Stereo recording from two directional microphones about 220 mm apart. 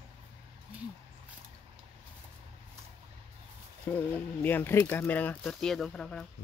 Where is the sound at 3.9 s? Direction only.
10° left (ahead or behind).